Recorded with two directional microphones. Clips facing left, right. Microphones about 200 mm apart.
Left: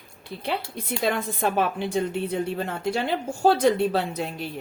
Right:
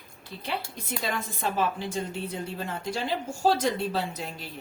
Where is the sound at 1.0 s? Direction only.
60° left (ahead or behind).